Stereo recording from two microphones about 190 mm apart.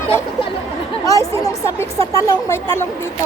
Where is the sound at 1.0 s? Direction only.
15° left (ahead or behind).